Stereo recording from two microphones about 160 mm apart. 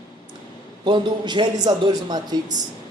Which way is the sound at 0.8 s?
30° right (ahead or behind).